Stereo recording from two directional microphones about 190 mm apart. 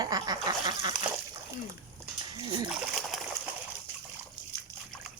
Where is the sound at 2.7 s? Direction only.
Centre (ahead or behind).